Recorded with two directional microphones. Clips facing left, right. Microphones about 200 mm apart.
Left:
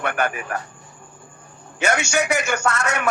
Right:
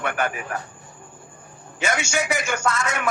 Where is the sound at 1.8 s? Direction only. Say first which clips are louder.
Left 3 dB; 70° left (ahead or behind).